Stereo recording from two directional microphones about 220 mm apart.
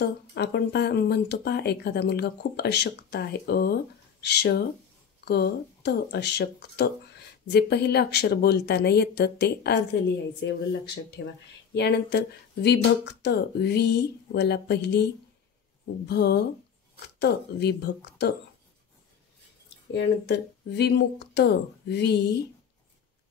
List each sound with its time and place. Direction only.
0.0 s speech: 50° left (ahead or behind)
11.2 s speech: 50° left (ahead or behind)
16.1 s speech: 50° left (ahead or behind)
19.9 s speech: 50° left (ahead or behind)